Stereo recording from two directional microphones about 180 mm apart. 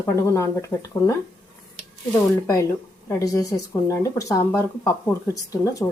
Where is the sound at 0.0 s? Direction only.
15° left (ahead or behind).